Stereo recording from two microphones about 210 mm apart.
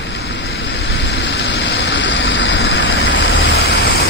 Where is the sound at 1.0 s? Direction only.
55° left (ahead or behind).